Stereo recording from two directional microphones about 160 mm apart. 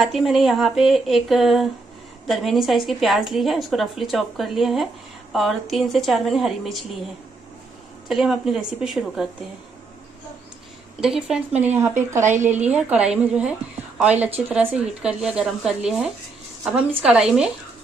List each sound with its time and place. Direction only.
0.0 s a woman's voice: centre (ahead or behind)
8.1 s a woman's voice: 5° right (ahead or behind)
11.0 s a woman's voice: 5° right (ahead or behind)